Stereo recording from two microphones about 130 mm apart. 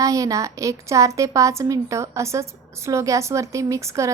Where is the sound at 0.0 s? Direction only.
25° right (ahead or behind).